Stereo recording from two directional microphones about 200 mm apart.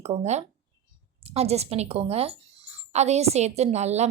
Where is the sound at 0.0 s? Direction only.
30° right (ahead or behind).